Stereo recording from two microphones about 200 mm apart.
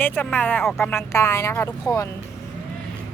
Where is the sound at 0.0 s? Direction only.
10° left (ahead or behind).